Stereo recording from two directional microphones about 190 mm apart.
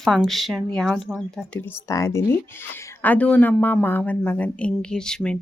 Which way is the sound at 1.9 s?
15° left (ahead or behind).